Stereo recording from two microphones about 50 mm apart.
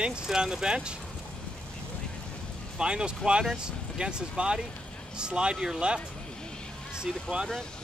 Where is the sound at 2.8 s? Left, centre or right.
Centre.